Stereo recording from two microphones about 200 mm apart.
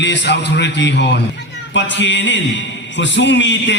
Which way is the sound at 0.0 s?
60° left (ahead or behind).